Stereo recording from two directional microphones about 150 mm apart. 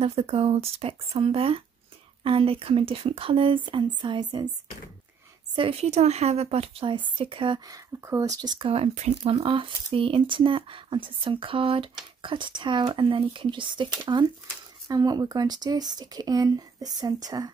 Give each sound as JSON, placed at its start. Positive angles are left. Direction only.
{"t": 0.0, "sound": "speech", "side_deg": -40}
{"t": 5.6, "sound": "speech", "side_deg": -40}